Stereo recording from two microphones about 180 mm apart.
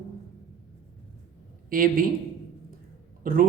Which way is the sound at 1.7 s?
50° right (ahead or behind).